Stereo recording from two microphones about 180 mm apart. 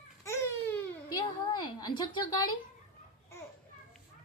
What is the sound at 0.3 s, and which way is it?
Babbling, 15° left (ahead or behind).